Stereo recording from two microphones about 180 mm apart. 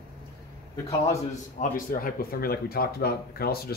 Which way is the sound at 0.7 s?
15° left (ahead or behind).